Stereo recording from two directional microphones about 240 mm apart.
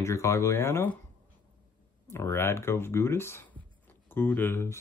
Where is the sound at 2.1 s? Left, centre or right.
Centre.